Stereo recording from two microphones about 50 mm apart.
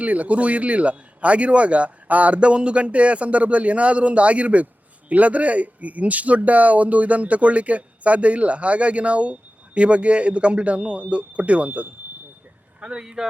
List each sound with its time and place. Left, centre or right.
0.0 s a man's voice: right